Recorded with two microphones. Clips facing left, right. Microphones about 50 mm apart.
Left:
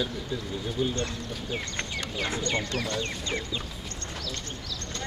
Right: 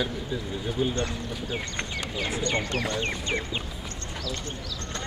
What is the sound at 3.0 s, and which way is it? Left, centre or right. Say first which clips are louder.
Speech: right 3 dB; right.